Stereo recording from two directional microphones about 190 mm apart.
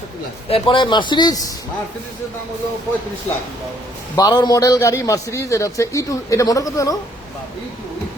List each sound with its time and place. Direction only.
0.5 s speech: 25° left (ahead or behind)
4.1 s a man's voice: 20° left (ahead or behind)